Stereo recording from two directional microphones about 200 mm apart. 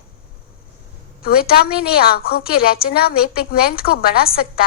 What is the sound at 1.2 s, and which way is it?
A woman's voice, 50° left (ahead or behind).